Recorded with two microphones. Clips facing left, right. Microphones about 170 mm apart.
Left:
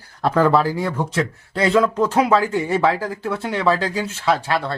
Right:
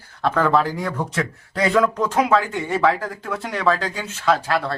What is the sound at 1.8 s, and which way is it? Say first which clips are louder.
Speech: left 1 dB; 25° left (ahead or behind).